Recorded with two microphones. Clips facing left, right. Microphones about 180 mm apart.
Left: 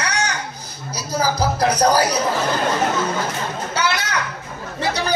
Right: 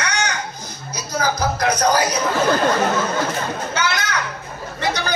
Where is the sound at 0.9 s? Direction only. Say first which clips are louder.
Left 1 dB; 30° left (ahead or behind).